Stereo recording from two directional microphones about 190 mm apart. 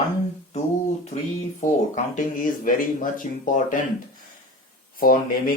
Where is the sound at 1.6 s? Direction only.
40° left (ahead or behind).